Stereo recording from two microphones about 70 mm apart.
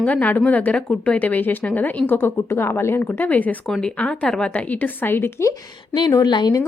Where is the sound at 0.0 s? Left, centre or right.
Left.